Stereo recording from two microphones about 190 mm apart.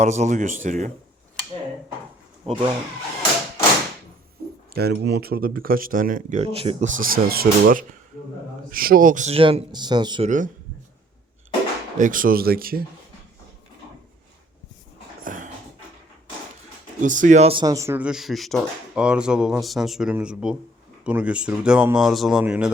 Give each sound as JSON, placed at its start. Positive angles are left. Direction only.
{"t": 0.0, "sound": "speech", "side_deg": -35}
{"t": 2.5, "sound": "speech", "side_deg": -30}
{"t": 4.7, "sound": "speech", "side_deg": -55}
{"t": 6.4, "sound": "speech", "side_deg": -30}
{"t": 10.2, "sound": "speech", "side_deg": -40}
{"t": 11.9, "sound": "speech", "side_deg": -45}
{"t": 15.2, "sound": "dog", "side_deg": -45}
{"t": 17.0, "sound": "speech", "side_deg": -40}